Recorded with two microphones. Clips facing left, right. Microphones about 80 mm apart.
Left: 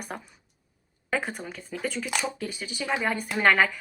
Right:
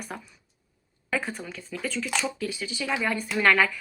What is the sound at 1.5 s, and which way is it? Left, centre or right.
Speech, left.